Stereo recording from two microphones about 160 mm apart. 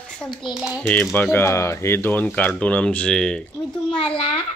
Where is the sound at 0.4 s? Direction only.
Centre (ahead or behind).